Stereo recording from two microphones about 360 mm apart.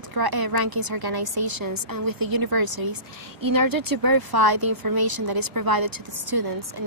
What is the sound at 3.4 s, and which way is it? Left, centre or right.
A woman's voice, right.